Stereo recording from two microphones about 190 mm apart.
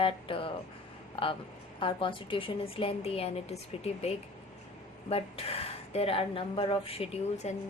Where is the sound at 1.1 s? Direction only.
30° left (ahead or behind).